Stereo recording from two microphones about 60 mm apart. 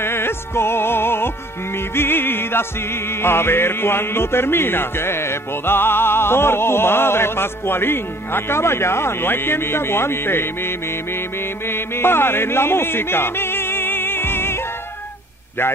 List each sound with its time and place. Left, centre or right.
0.0 s music: left